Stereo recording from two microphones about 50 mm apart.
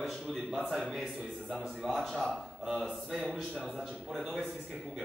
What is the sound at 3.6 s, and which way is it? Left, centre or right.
Speech, centre.